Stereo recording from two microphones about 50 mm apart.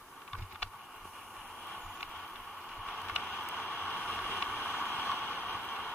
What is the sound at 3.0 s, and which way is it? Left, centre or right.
Vehicle, left.